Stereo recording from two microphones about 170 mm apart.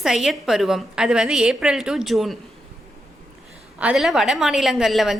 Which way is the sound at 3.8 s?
5° right (ahead or behind).